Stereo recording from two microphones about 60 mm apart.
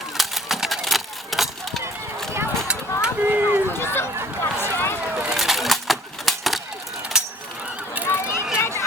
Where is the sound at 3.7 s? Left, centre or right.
Left.